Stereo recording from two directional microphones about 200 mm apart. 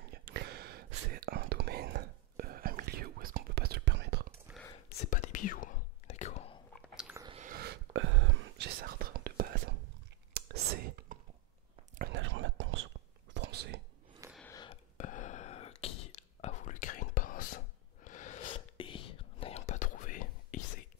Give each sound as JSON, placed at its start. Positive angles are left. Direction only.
{"t": 0.1, "sound": "a sound", "side_deg": -55}
{"t": 1.1, "sound": "whispering", "side_deg": -50}
{"t": 4.5, "sound": "whispering", "side_deg": -10}
{"t": 4.8, "sound": "whispering", "side_deg": 40}
{"t": 6.7, "sound": "chewing", "side_deg": -5}
{"t": 7.3, "sound": "whispering", "side_deg": -45}
{"t": 8.8, "sound": "whispering", "side_deg": -45}
{"t": 12.0, "sound": "whispering", "side_deg": -65}
{"t": 14.5, "sound": "whispering", "side_deg": 20}
{"t": 15.0, "sound": "a sound", "side_deg": 40}
{"t": 15.8, "sound": "whispering", "side_deg": 30}
{"t": 18.0, "sound": "a sound", "side_deg": 40}
{"t": 18.8, "sound": "whispering", "side_deg": 25}